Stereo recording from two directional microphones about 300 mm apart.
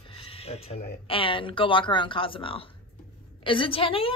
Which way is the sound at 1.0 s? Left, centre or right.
Centre.